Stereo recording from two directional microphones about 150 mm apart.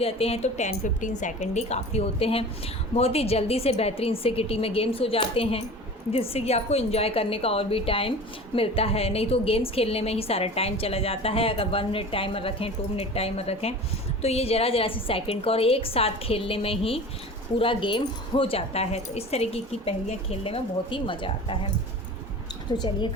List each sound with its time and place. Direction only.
0.0 s a woman's voice: 40° left (ahead or behind)